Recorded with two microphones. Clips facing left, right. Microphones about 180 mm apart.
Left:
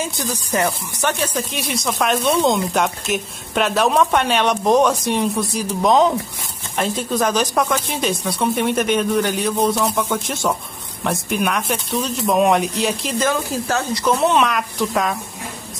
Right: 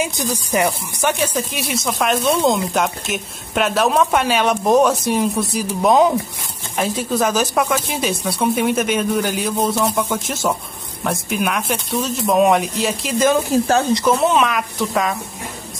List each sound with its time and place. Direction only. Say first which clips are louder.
0.0 s speech: right 3 dB; 15° right (ahead or behind)
13.2 s speech: right 7 dB; 20° right (ahead or behind)
14.0 s speech: right 1 dB; centre (ahead or behind)